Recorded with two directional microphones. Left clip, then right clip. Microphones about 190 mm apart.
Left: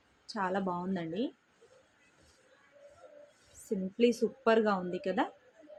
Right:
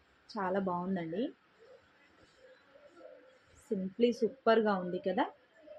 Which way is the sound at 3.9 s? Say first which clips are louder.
Left 2 dB; 25° left (ahead or behind).